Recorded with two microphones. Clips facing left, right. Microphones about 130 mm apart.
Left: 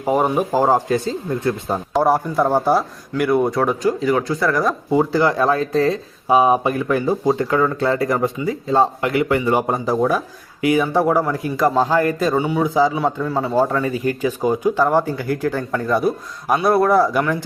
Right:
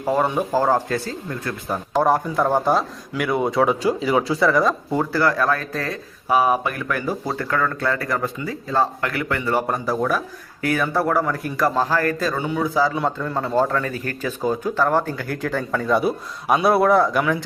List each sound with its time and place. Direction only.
0.0 s speech: 15° left (ahead or behind)
1.9 s a man's voice: 10° left (ahead or behind)
4.9 s a man's voice: 15° left (ahead or behind)